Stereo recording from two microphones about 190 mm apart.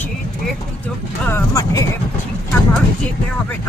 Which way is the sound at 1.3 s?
20° left (ahead or behind).